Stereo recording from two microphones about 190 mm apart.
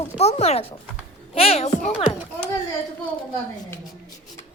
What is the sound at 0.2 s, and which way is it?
A child's voice, 35° left (ahead or behind).